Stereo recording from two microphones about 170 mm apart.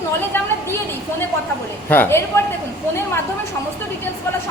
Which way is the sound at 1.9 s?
15° left (ahead or behind).